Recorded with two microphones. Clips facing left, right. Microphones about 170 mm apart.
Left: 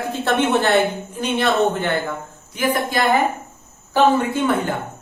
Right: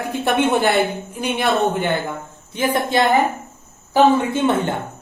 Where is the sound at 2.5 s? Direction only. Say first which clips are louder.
Right 1 dB; 25° right (ahead or behind).